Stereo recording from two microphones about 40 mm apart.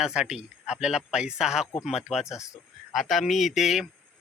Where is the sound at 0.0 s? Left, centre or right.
Centre.